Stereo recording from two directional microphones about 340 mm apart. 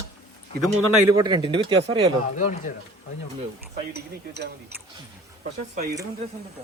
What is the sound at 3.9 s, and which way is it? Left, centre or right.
Speech, right.